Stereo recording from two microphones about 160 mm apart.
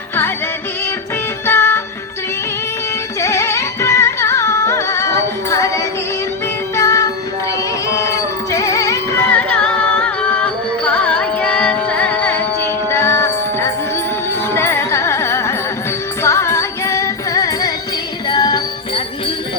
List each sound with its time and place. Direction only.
1.5 s music: 15° left (ahead or behind)
3.2 s music: 15° left (ahead or behind)
6.7 s child singing: 20° left (ahead or behind)
7.9 s music: 20° left (ahead or behind)
14.5 s carnatic music: 15° left (ahead or behind)
16.2 s music: 15° left (ahead or behind)